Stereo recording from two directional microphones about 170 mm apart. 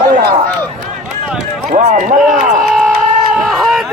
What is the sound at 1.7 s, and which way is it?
Run, 45° right (ahead or behind).